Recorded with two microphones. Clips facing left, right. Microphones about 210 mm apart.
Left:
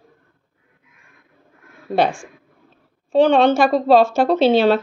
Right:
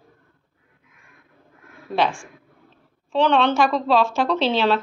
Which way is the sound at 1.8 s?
50° left (ahead or behind).